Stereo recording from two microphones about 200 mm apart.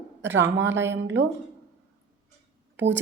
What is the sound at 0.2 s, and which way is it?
A woman's voice, 65° right (ahead or behind).